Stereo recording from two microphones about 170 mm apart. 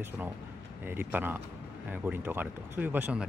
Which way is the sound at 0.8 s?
10° right (ahead or behind).